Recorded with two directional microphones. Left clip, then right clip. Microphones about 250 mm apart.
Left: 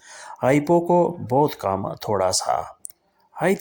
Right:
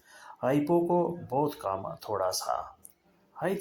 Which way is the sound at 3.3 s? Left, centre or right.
Left.